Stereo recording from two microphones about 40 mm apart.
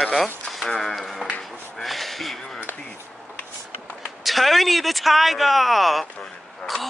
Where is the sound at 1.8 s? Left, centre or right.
Centre.